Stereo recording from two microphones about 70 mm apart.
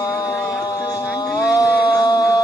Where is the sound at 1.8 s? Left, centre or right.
Left.